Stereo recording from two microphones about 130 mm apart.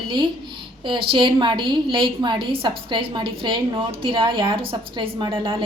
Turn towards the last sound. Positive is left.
turn(degrees=-40)  # may be behind; listen again after turning